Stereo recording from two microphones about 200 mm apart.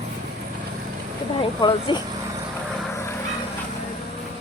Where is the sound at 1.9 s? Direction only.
25° left (ahead or behind).